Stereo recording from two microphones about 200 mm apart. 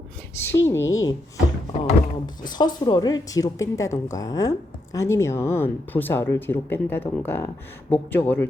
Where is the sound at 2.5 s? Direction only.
20° left (ahead or behind).